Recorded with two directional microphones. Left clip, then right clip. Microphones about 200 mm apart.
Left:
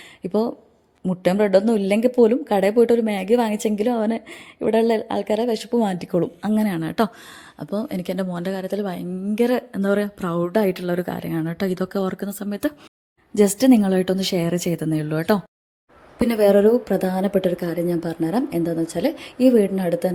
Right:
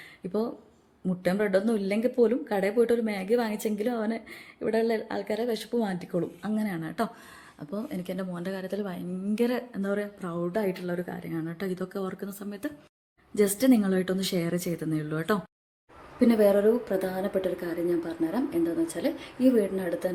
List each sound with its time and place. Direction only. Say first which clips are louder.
0.2 s a woman's voice: left 8 dB; 40° left (ahead or behind)
13.3 s speech: left 7 dB; 35° left (ahead or behind)